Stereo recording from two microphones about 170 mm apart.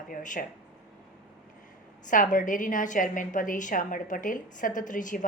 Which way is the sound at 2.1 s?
50° left (ahead or behind).